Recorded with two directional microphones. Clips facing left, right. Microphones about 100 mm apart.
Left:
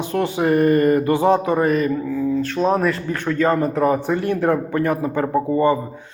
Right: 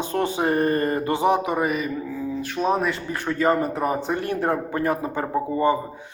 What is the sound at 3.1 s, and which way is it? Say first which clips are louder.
Speech: even; 20° right (ahead or behind).